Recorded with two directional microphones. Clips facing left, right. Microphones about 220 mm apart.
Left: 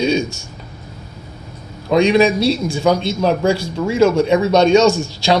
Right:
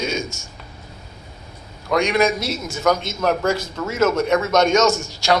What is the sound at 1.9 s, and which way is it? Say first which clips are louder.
Speech: left 6 dB; 15° left (ahead or behind).